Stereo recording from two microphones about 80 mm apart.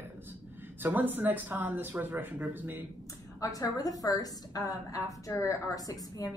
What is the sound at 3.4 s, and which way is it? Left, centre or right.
A woman's voice, left.